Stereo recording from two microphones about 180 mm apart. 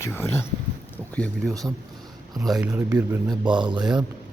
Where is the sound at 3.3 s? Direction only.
25° right (ahead or behind).